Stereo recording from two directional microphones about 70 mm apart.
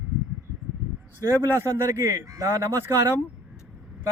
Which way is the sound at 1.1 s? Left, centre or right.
Right.